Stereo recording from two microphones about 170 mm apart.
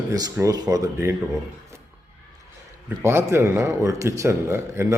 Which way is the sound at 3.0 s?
15° right (ahead or behind).